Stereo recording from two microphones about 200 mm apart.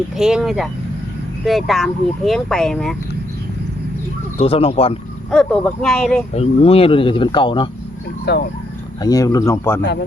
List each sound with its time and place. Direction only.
0.2 s speech: centre (ahead or behind)
4.4 s speech: 30° left (ahead or behind)
5.3 s speech: 5° left (ahead or behind)
6.3 s speech: 30° left (ahead or behind)
8.3 s speech: 60° left (ahead or behind)
9.0 s speech: 20° left (ahead or behind)